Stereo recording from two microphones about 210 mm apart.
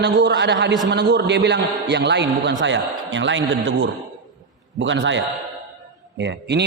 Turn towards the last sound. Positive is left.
turn(degrees=-55)  # may be behind; listen again after turning